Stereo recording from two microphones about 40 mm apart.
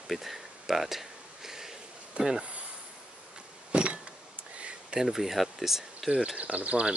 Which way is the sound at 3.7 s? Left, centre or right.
Right.